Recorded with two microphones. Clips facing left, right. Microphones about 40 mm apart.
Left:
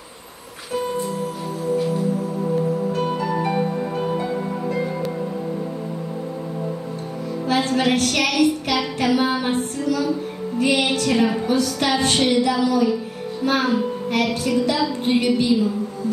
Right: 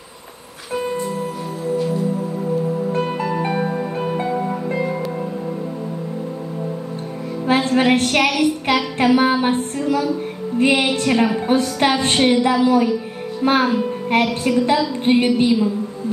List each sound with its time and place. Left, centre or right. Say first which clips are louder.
3.2 s music: right 1 dB; right
3.5 s music: right 1 dB; centre
7.4 s music: right 4 dB; right
13.4 s a woman's voice: right 3 dB; right